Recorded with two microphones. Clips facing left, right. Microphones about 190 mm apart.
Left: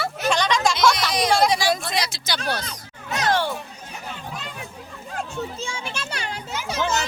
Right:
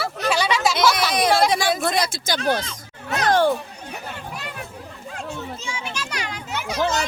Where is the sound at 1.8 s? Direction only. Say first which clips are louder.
Right 5 dB; 50° right (ahead or behind).